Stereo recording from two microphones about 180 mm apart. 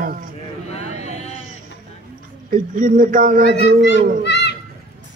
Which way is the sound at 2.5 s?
50° right (ahead or behind).